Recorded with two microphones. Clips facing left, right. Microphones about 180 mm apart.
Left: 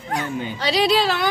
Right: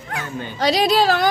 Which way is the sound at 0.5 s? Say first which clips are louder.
Right 3 dB; 45° right (ahead or behind).